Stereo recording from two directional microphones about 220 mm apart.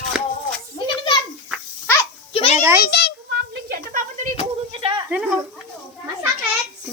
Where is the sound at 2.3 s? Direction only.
25° left (ahead or behind).